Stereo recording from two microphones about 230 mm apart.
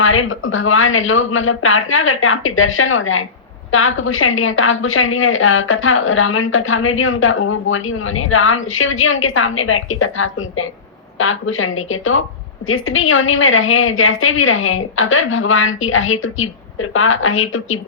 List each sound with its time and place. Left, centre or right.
0.0 s a woman's voice: left